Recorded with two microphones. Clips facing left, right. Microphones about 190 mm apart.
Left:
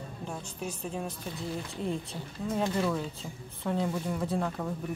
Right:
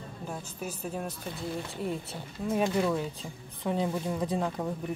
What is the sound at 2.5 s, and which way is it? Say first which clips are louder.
Speech: right 2 dB; 15° right (ahead or behind).